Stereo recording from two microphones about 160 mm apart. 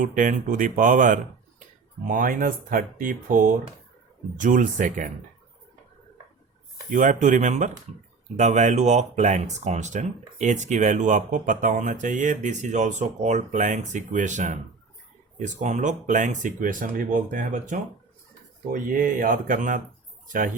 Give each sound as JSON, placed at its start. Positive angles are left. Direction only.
{"t": 0.0, "sound": "speech", "side_deg": -55}
{"t": 6.9, "sound": "speech", "side_deg": -55}